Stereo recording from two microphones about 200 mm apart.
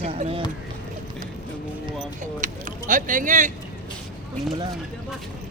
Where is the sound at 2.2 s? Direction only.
40° right (ahead or behind).